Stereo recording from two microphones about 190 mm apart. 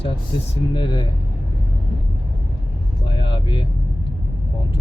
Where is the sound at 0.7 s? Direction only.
25° left (ahead or behind).